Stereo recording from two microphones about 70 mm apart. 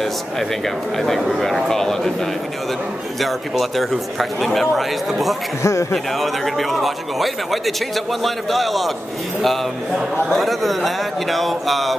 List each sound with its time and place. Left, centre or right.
0.9 s a man's voice: centre
3.2 s a man's voice: centre
5.6 s a man's voice: left
6.1 s a man's voice: centre